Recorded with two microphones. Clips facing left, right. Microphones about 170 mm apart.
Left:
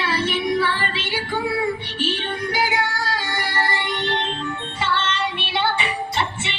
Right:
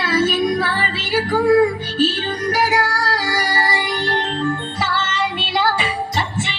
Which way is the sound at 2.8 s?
70° right (ahead or behind).